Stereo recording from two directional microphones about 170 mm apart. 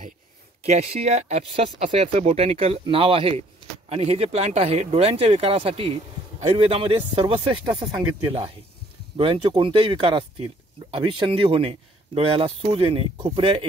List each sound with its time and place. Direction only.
0.7 s speech: 40° right (ahead or behind)
9.1 s speech: 30° right (ahead or behind)